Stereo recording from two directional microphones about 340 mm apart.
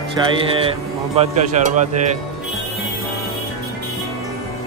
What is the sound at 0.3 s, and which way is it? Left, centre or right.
A man's voice, centre.